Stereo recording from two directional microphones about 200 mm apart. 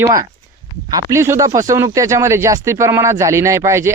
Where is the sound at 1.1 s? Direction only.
15° right (ahead or behind).